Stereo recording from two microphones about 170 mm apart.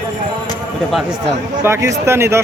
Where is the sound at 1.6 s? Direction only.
15° right (ahead or behind).